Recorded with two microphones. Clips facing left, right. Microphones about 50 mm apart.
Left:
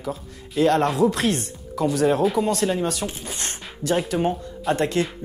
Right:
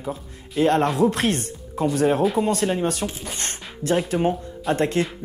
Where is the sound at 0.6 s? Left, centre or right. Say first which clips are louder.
Even; right.